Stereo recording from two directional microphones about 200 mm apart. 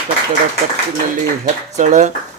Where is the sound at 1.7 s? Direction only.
35° right (ahead or behind).